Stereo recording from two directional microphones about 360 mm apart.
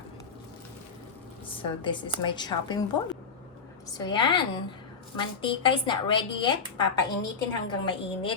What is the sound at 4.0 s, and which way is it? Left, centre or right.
A woman's voice, centre.